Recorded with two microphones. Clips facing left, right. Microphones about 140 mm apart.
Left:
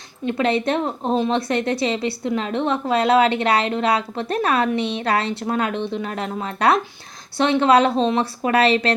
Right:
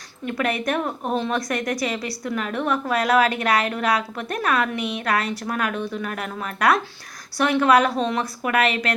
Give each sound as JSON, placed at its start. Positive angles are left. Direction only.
{"t": 0.3, "sound": "a woman's voice", "side_deg": 25}